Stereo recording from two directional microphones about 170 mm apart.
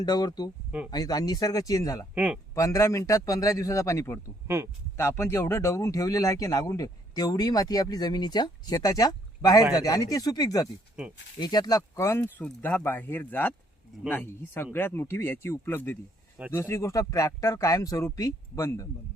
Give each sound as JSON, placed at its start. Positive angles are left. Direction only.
{"t": 0.0, "sound": "speech", "side_deg": 25}
{"t": 2.1, "sound": "speech", "side_deg": -10}
{"t": 2.6, "sound": "speech", "side_deg": 20}
{"t": 4.4, "sound": "speech", "side_deg": -15}
{"t": 4.9, "sound": "speech", "side_deg": 15}